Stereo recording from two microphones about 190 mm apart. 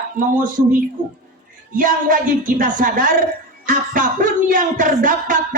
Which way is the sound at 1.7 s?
45° right (ahead or behind).